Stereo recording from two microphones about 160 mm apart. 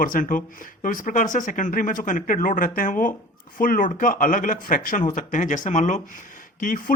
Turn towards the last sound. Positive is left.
turn(degrees=60)  # may be behind; listen again after turning